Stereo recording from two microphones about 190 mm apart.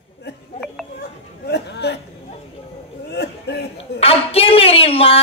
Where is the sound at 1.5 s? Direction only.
60° left (ahead or behind).